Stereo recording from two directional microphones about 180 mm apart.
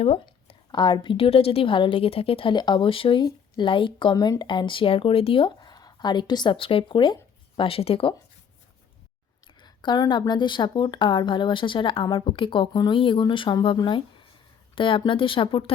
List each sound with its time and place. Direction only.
0.0 s a sound: 35° left (ahead or behind)
0.7 s a woman's voice: 25° left (ahead or behind)
9.6 s a woman's voice: 25° left (ahead or behind)